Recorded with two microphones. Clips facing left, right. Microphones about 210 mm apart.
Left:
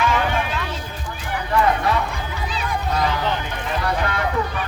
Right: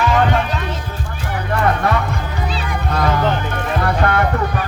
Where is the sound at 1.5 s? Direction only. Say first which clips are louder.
Right 1 dB; 55° right (ahead or behind).